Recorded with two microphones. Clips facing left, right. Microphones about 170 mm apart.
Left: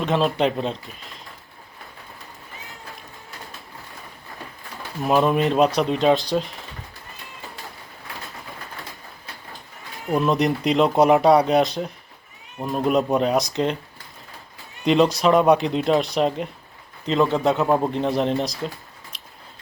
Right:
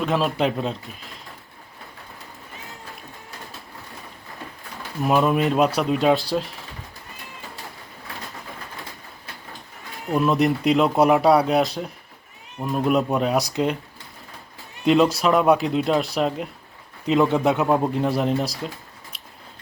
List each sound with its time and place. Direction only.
0.0 s speech: centre (ahead or behind)
5.0 s speech: centre (ahead or behind)
10.2 s a man's voice: centre (ahead or behind)
14.8 s speech: centre (ahead or behind)
17.1 s a man's voice: 15° right (ahead or behind)
17.7 s speech: centre (ahead or behind)